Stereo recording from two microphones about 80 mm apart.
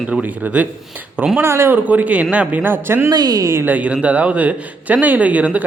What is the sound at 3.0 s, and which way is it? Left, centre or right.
Speech, right.